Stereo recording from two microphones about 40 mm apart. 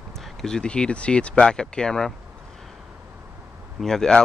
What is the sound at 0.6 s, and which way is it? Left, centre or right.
Speech, left.